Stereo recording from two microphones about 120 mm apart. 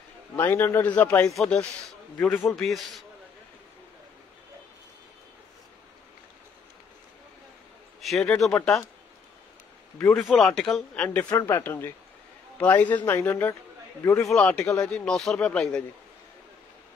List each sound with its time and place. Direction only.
0.4 s speech: 20° left (ahead or behind)
2.4 s speech: centre (ahead or behind)
8.0 s a sound: centre (ahead or behind)
8.4 s speech: 5° left (ahead or behind)
10.1 s speech: 5° left (ahead or behind)
11.2 s speech: 20° left (ahead or behind)
14.3 s speech: 10° left (ahead or behind)